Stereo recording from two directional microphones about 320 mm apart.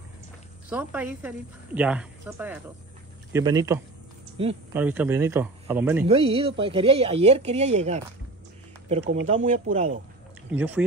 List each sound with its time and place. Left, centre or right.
0.7 s a woman's voice: centre
4.7 s speech: centre
6.0 s speech: centre
9.3 s speech: right
10.5 s a woman's voice: centre